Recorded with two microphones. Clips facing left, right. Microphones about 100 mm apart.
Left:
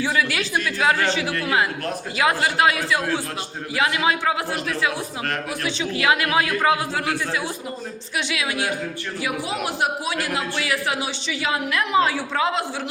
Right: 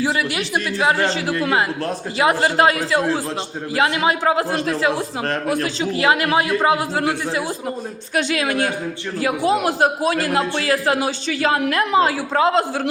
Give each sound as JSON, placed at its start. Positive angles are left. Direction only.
{"t": 0.0, "sound": "a woman's voice", "side_deg": -30}
{"t": 8.1, "sound": "a woman's voice", "side_deg": -45}